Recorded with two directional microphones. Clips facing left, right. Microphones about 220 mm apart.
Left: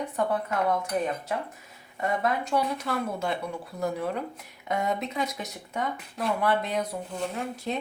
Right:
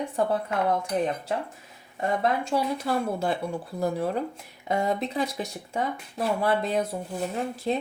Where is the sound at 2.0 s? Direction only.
30° right (ahead or behind).